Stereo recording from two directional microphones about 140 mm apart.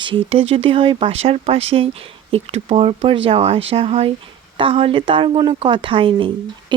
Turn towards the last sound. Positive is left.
turn(degrees=-35)  # may be behind; listen again after turning